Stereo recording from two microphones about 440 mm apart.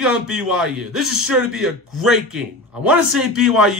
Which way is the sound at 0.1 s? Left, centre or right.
Right.